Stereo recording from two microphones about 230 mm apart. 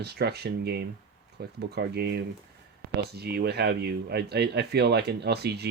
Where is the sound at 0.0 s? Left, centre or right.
Right.